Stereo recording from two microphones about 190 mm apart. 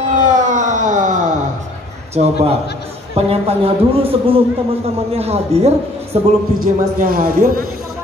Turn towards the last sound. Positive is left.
turn(degrees=-55)  # may be behind; listen again after turning